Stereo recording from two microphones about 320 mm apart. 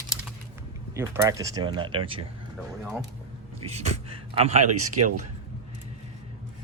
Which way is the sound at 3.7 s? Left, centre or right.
Centre.